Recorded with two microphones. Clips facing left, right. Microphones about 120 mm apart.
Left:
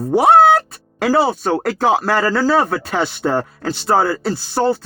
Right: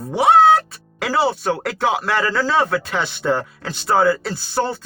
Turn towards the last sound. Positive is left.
turn(degrees=30)  # may be behind; listen again after turning